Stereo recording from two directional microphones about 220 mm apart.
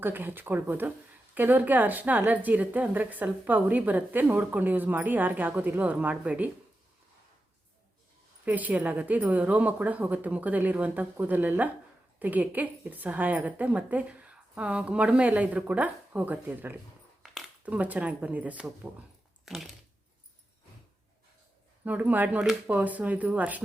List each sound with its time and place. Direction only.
0.0 s a woman's voice: 10° right (ahead or behind)
8.4 s a woman's voice: 5° right (ahead or behind)
21.8 s a woman's voice: 5° right (ahead or behind)